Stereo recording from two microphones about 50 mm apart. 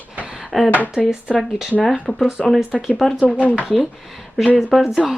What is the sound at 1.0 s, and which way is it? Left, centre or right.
Speech, centre.